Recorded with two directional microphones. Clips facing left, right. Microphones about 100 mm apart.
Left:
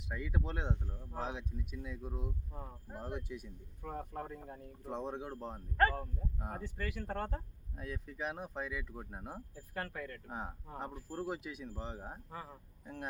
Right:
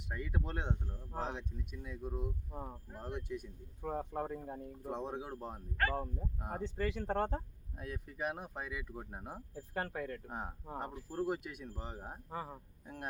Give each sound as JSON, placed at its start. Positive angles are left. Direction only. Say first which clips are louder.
{"t": 0.1, "sound": "speech", "louder": "even", "side_deg": 0}
{"t": 0.9, "sound": "speech", "louder": "even", "side_deg": 15}
{"t": 1.2, "sound": "speech", "louder": "even", "side_deg": 0}
{"t": 2.5, "sound": "speech", "louder": "right 4 dB", "side_deg": -20}
{"t": 3.0, "sound": "speech", "louder": "right 1 dB", "side_deg": 0}
{"t": 3.8, "sound": "speech", "louder": "right 4 dB", "side_deg": -20}
{"t": 4.6, "sound": "speech", "louder": "even", "side_deg": -5}
{"t": 5.9, "sound": "speech", "louder": "right 3 dB", "side_deg": -20}
{"t": 7.8, "sound": "speech", "louder": "right 1 dB", "side_deg": -5}
{"t": 9.6, "sound": "speech", "louder": "right 4 dB", "side_deg": -25}
{"t": 10.2, "sound": "speech", "louder": "even", "side_deg": 0}
{"t": 12.3, "sound": "speech", "louder": "right 8 dB", "side_deg": -25}
{"t": 12.8, "sound": "speech", "louder": "left 2 dB", "side_deg": -5}